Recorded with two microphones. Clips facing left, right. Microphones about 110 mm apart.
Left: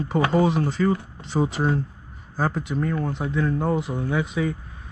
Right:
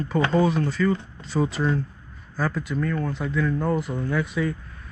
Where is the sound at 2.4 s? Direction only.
30° left (ahead or behind).